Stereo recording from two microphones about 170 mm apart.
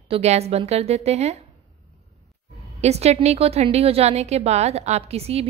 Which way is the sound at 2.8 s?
40° right (ahead or behind).